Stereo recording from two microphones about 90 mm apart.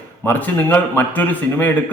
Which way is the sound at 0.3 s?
20° left (ahead or behind).